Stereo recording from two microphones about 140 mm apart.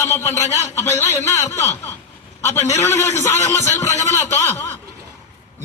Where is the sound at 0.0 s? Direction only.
20° left (ahead or behind).